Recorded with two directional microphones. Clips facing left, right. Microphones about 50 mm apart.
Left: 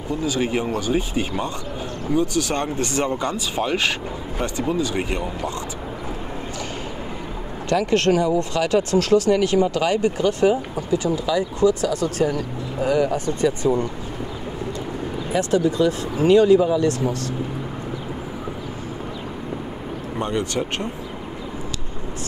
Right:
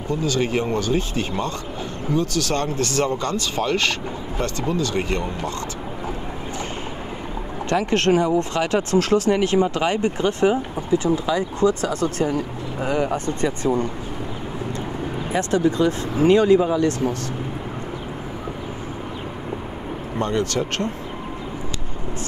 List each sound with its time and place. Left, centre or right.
0.1 s speech: centre
7.7 s speech: right
15.3 s speech: right
20.2 s speech: centre